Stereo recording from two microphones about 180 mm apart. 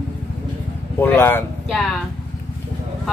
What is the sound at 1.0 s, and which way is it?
Speech, 10° left (ahead or behind).